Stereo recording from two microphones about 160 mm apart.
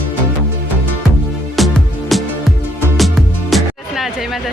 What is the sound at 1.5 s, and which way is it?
Music, centre (ahead or behind).